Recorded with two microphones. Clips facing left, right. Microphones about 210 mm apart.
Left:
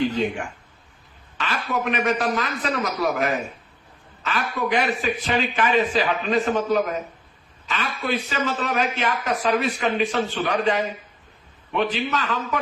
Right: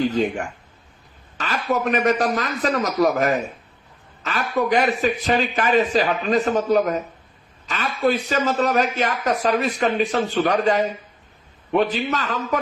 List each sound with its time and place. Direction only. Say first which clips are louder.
0.0 s a man's voice: right 2 dB; 40° right (ahead or behind)